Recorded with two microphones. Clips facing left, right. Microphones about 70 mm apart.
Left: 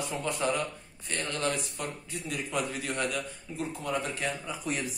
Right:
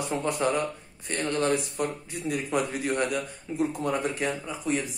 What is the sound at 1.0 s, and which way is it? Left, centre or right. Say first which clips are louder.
A man's voice: right 6 dB; right.